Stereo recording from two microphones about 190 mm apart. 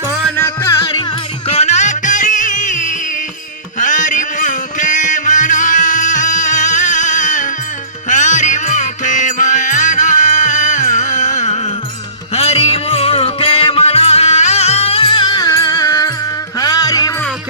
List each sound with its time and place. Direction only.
0.3 s music: 15° left (ahead or behind)
1.5 s music: 35° left (ahead or behind); by 17.2 s 20° left (ahead or behind)